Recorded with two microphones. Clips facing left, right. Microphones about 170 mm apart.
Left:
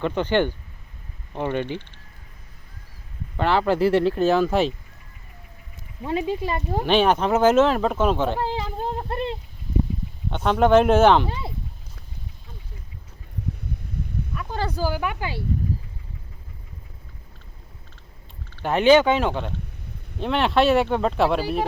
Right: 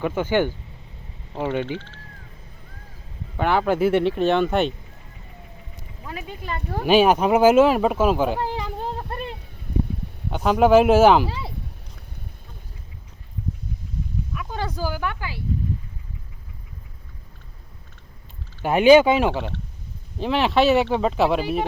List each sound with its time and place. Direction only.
0.0 s speech: 10° right (ahead or behind)
3.3 s speech: 15° right (ahead or behind)
3.6 s speech: centre (ahead or behind)
6.0 s speech: 25° left (ahead or behind)
6.8 s speech: 10° right (ahead or behind)
9.0 s a sound: 25° left (ahead or behind)
10.2 s speech: 5° right (ahead or behind)
14.3 s speech: centre (ahead or behind)
15.2 s speech: 30° left (ahead or behind)
18.6 s speech: 10° right (ahead or behind)